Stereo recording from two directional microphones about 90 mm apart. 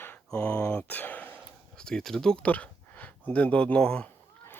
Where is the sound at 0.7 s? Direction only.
15° left (ahead or behind).